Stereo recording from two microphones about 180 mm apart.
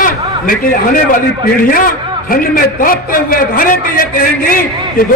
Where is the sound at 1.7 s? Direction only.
50° left (ahead or behind).